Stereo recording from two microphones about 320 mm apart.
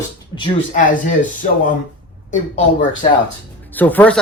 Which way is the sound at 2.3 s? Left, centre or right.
Left.